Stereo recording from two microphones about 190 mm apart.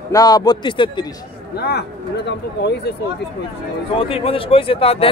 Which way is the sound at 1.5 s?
60° left (ahead or behind).